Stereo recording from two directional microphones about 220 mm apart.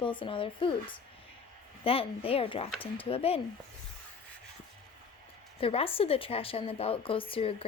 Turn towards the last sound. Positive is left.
turn(degrees=25)  # may be behind; listen again after turning